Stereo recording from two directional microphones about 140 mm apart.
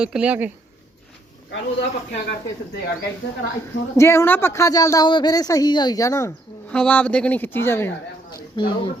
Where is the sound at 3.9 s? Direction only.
20° left (ahead or behind).